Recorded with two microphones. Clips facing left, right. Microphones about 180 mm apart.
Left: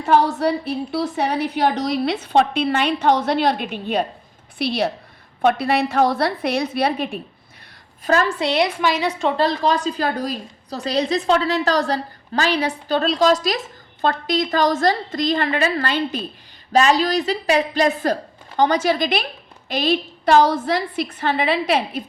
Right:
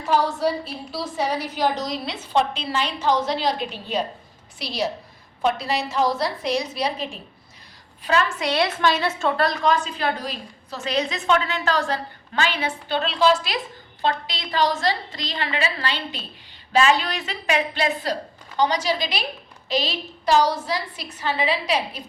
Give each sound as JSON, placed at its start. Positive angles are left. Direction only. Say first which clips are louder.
{"t": 0.1, "sound": "a woman's voice", "louder": "left 4 dB", "side_deg": 60}
{"t": 8.4, "sound": "a woman's voice", "louder": "left 3 dB", "side_deg": 20}
{"t": 9.5, "sound": "a woman's voice", "louder": "left 2 dB", "side_deg": 30}
{"t": 16.7, "sound": "a woman's voice", "louder": "left 3 dB", "side_deg": 40}